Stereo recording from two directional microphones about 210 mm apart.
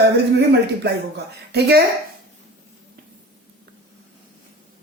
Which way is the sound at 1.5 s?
50° right (ahead or behind).